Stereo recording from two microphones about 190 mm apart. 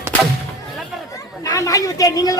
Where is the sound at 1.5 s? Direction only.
15° left (ahead or behind).